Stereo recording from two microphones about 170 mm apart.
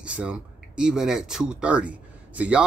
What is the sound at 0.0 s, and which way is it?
Speech, 5° right (ahead or behind).